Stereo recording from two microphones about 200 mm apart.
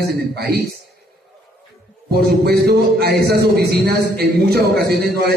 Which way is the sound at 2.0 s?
50° right (ahead or behind).